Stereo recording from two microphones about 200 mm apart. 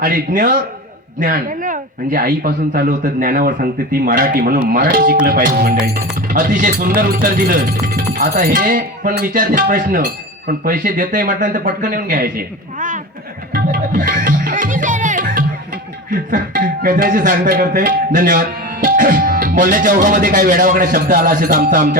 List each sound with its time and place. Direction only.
0.0 s speech: 45° right (ahead or behind)
13.5 s music: 40° right (ahead or behind)
16.0 s speech: 40° right (ahead or behind)